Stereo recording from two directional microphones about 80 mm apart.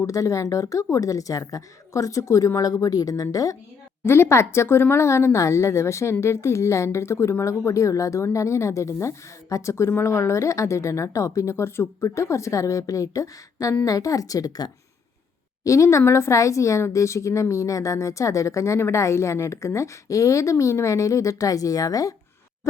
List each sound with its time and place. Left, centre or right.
0.0 s a woman's voice: left
4.0 s a woman's voice: left
15.6 s speech: left